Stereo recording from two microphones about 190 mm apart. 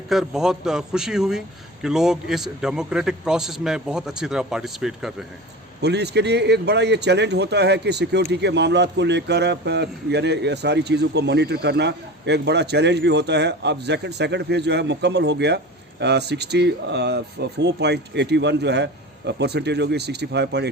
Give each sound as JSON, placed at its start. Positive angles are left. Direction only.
{"t": 0.1, "sound": "a man's voice", "side_deg": 0}
{"t": 5.8, "sound": "a man's voice", "side_deg": -60}